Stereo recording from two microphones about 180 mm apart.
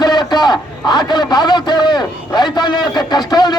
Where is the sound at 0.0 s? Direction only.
25° left (ahead or behind).